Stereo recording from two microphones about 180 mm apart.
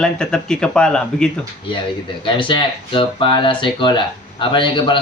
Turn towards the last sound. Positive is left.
turn(degrees=25)  # may be behind; listen again after turning